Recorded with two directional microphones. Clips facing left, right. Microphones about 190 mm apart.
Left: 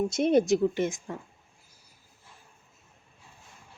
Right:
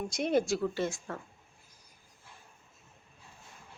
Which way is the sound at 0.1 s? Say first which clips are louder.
Left 4 dB; 20° left (ahead or behind).